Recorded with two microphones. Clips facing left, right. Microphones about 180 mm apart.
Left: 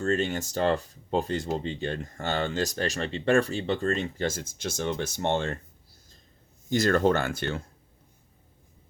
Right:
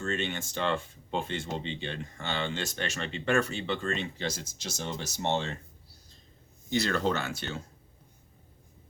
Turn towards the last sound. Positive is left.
turn(degrees=55)  # may be behind; listen again after turning